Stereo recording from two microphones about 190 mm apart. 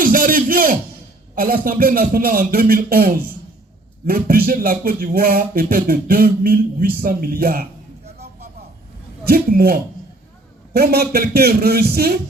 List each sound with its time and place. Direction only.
0.0 s a sound: 45° right (ahead or behind)
1.4 s speech: 50° right (ahead or behind)
9.2 s speech: 50° right (ahead or behind)
10.8 s speech: 55° right (ahead or behind)